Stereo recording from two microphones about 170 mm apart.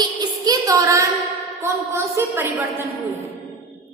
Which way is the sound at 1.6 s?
15° right (ahead or behind).